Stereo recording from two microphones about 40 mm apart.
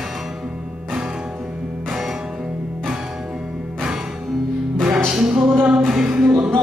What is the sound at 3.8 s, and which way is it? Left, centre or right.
Music, centre.